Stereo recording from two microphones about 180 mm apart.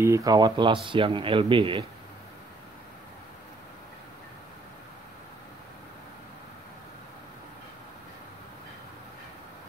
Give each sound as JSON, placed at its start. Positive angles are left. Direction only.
{"t": 0.0, "sound": "speech", "side_deg": -20}